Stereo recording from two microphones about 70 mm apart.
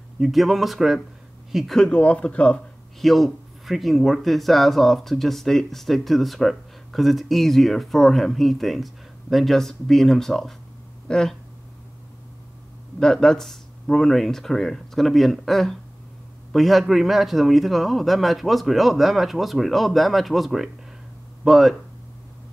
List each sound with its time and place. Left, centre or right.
0.2 s speech: centre
1.8 s speech: centre
3.0 s speech: centre
13.0 s speech: centre